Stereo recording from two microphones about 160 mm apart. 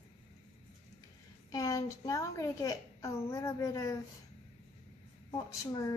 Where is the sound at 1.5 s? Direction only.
20° left (ahead or behind).